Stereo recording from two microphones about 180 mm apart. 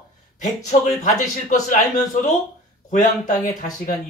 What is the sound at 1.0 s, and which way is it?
Speech, 45° left (ahead or behind).